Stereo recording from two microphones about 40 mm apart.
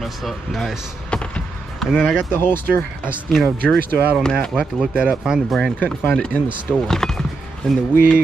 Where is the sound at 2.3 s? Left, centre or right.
Left.